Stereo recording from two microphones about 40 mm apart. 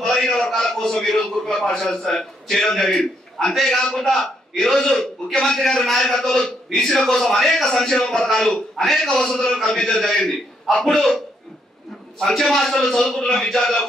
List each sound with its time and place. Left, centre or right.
0.0 s a sound: centre
0.6 s a man's voice: centre
12.2 s a man's voice: centre